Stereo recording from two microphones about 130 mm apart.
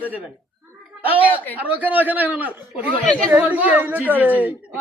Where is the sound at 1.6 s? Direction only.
10° right (ahead or behind).